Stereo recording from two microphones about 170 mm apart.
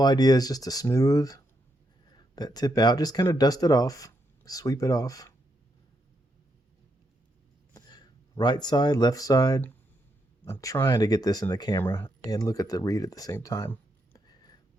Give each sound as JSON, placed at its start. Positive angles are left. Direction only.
{"t": 0.0, "sound": "speech", "side_deg": 25}
{"t": 7.7, "sound": "speech", "side_deg": 25}
{"t": 14.3, "sound": "a sound", "side_deg": 25}